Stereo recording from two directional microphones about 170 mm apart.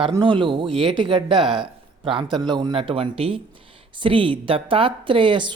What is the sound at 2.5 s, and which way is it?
Speech, 25° right (ahead or behind).